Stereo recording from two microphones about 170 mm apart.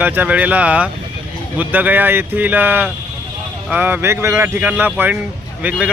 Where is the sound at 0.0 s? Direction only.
10° right (ahead or behind).